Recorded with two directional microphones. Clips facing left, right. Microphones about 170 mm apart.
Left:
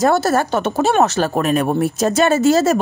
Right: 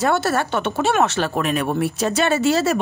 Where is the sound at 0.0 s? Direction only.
40° left (ahead or behind).